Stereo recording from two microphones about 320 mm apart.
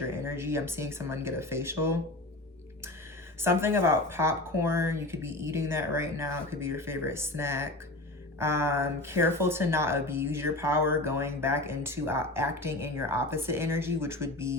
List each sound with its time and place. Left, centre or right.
0.3 s speech: centre
3.4 s speech: centre